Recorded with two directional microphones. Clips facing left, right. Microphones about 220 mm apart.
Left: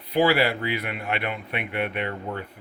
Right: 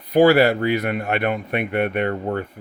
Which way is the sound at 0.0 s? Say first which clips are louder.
Right 7 dB; 45° right (ahead or behind).